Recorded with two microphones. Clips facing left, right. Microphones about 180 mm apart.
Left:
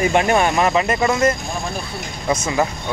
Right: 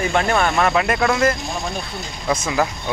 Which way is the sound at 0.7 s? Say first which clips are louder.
Left 1 dB; centre (ahead or behind).